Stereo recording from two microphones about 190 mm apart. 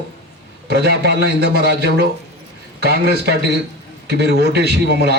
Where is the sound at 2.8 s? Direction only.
60° right (ahead or behind).